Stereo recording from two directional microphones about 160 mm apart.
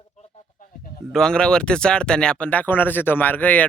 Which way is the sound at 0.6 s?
65° left (ahead or behind).